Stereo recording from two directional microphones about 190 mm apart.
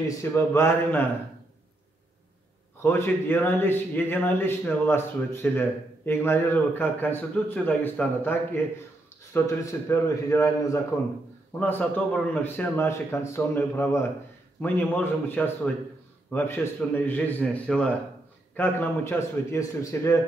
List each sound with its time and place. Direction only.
0.2 s a man's voice: 15° left (ahead or behind)
2.8 s a man's voice: 10° left (ahead or behind)